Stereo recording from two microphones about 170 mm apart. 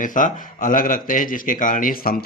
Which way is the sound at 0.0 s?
50° left (ahead or behind).